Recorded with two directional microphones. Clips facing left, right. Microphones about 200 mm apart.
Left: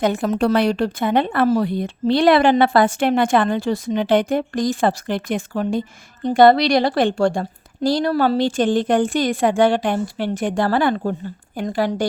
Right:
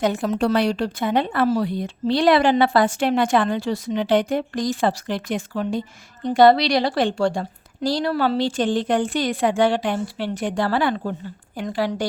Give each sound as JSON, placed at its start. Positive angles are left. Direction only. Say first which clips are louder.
{"t": 0.0, "sound": "a woman's voice", "louder": "left 2 dB", "side_deg": 55}